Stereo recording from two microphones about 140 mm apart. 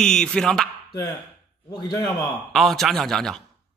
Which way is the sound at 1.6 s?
30° left (ahead or behind).